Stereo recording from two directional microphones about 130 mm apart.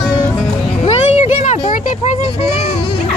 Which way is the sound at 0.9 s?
60° left (ahead or behind).